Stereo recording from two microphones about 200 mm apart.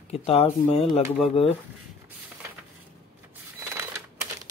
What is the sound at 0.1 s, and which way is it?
Speech, 30° left (ahead or behind).